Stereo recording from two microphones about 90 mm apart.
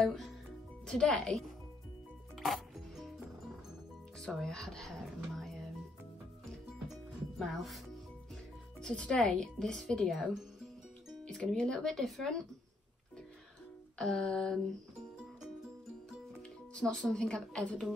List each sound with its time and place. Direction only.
0.0 s speech: 5° left (ahead or behind)
2.3 s music: centre (ahead or behind)
4.4 s speech: 5° left (ahead or behind)
6.9 s music: centre (ahead or behind)
8.8 s speech: 10° left (ahead or behind)
11.5 s speech: 5° left (ahead or behind)
13.9 s speech: 5° left (ahead or behind)
16.7 s speech: 5° left (ahead or behind)